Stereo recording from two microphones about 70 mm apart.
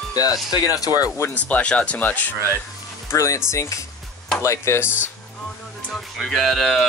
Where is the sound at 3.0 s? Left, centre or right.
Left.